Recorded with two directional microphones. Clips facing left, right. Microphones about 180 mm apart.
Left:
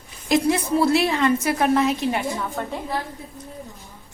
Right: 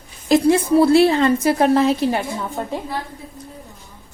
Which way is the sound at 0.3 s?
30° right (ahead or behind).